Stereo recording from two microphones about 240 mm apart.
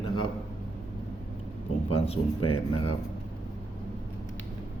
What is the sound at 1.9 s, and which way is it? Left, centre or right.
Speech, left.